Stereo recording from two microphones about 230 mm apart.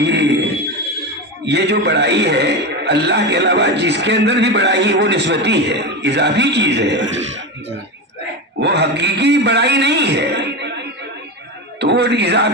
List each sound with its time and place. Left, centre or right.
0.0 s a sound: right
1.4 s a man's voice: right
8.5 s a man's voice: right